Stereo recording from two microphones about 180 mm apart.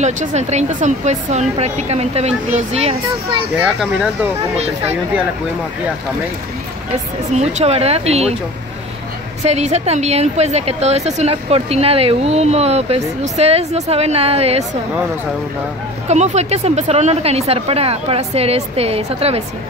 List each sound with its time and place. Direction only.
0.0 s a woman's voice: 40° right (ahead or behind)
7.3 s a woman's voice: 35° right (ahead or behind)
9.4 s a woman's voice: 35° right (ahead or behind)
16.1 s a woman's voice: 40° right (ahead or behind)